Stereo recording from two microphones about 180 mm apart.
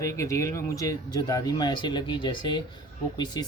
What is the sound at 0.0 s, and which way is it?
Speech, 15° left (ahead or behind).